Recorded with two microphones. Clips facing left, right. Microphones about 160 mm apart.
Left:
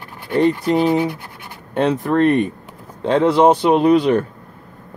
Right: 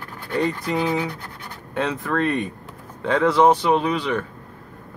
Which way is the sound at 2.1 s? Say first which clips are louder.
Left 7 dB; 65° left (ahead or behind).